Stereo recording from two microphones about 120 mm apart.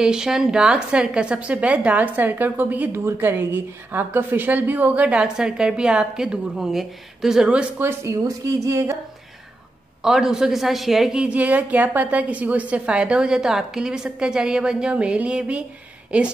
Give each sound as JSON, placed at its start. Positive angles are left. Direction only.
{"t": 0.0, "sound": "a woman's voice", "side_deg": -5}
{"t": 7.8, "sound": "speech", "side_deg": -25}
{"t": 10.0, "sound": "a woman's voice", "side_deg": -5}